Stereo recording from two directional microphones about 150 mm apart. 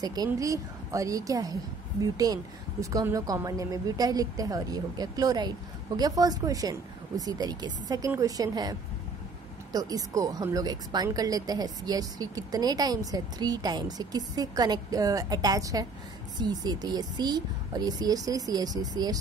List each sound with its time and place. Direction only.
0.0 s speech: 25° right (ahead or behind)